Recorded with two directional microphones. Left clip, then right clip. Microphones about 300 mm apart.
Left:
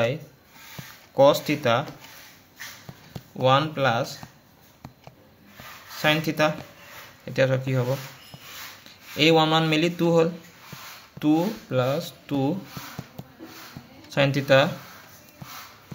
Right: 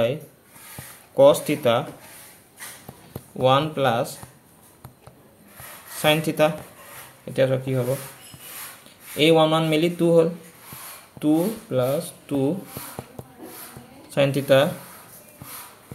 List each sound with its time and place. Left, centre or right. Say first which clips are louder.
1.1 s speech: right 3 dB; centre
3.3 s speech: right 2 dB; centre
5.9 s speech: right 3 dB; centre
9.1 s speech: right 2 dB; centre
14.0 s speech: right 2 dB; centre